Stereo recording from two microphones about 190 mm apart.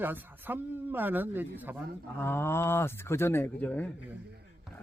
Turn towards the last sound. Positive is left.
turn(degrees=10)  # may be behind; listen again after turning